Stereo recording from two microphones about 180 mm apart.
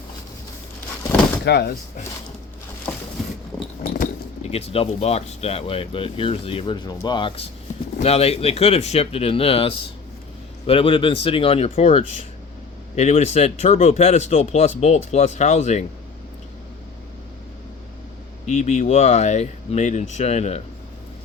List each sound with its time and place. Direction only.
1.5 s speech: 70° left (ahead or behind)
3.8 s speech: 45° left (ahead or behind)
18.4 s speech: 40° left (ahead or behind)